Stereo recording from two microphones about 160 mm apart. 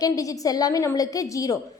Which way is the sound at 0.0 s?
20° left (ahead or behind).